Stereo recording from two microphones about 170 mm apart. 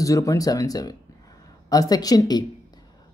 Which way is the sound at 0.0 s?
20° left (ahead or behind).